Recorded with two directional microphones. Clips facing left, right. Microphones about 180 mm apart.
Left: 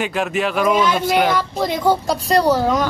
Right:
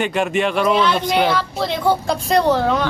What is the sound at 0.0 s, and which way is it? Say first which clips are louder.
A woman's voice: right 2 dB; centre (ahead or behind).